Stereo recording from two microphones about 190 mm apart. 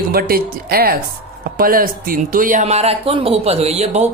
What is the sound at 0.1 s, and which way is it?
Speech, 55° right (ahead or behind).